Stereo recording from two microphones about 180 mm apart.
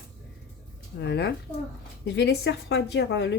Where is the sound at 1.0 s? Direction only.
70° left (ahead or behind).